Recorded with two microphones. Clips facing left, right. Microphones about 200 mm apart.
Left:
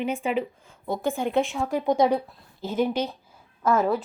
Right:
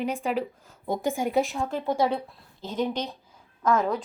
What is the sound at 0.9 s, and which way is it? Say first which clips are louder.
Speech: even; 10° right (ahead or behind).